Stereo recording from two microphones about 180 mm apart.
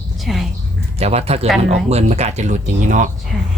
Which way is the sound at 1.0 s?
35° right (ahead or behind).